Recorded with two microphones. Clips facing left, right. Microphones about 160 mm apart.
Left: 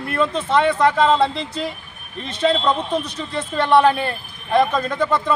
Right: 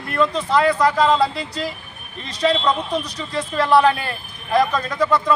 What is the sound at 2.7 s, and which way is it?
Speech, 30° left (ahead or behind).